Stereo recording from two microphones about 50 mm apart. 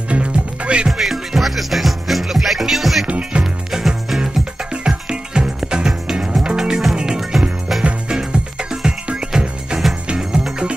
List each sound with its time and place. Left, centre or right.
0.1 s music: right
0.8 s music: centre
3.1 s music: right
3.7 s music: centre
8.1 s music: centre